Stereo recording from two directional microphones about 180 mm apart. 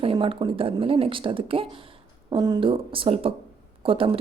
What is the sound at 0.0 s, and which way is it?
Speech, 30° right (ahead or behind).